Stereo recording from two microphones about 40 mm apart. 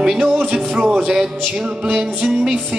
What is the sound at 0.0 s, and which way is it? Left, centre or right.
Speech, centre.